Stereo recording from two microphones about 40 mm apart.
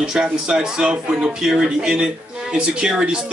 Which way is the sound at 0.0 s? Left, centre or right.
Centre.